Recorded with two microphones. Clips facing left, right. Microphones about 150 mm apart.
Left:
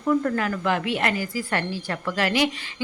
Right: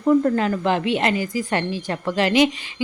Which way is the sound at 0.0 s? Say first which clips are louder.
Right 5 dB; 25° right (ahead or behind).